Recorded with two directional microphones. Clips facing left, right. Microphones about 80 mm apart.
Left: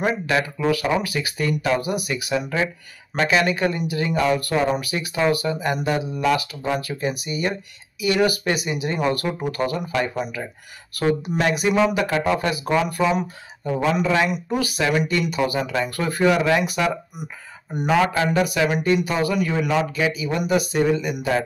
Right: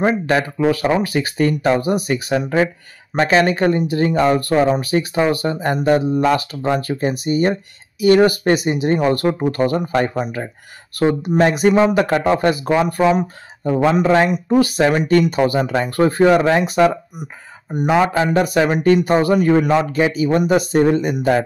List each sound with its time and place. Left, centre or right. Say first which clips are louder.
0.0 s speech: right 5 dB; right
17.7 s speech: right 4 dB; centre
18.3 s speech: right 4 dB; right